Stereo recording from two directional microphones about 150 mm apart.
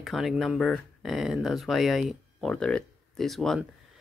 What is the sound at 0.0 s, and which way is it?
Speech, centre (ahead or behind).